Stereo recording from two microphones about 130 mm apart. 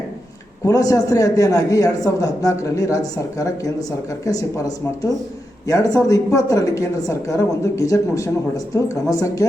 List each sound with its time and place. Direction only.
0.6 s a woman's voice: 25° left (ahead or behind)
5.6 s a woman's voice: 25° left (ahead or behind)